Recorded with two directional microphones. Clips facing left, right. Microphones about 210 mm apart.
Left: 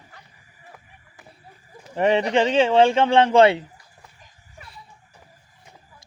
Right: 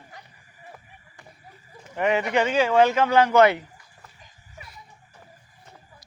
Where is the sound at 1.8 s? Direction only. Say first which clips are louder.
Left 4 dB; 35° left (ahead or behind).